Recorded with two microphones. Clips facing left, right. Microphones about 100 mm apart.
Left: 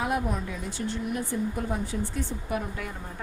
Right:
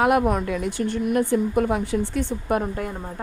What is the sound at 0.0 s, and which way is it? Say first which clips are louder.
A woman's voice: right 9 dB; 70° right (ahead or behind).